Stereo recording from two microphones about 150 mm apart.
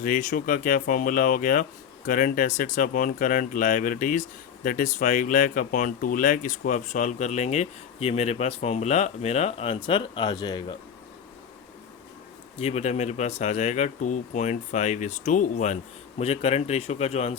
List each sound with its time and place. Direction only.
0.0 s speech: 65° left (ahead or behind); by 10.8 s 30° left (ahead or behind)
12.5 s speech: 45° left (ahead or behind)